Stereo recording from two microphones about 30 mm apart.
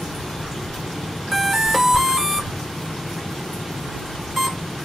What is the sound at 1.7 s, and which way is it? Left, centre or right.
Music, centre.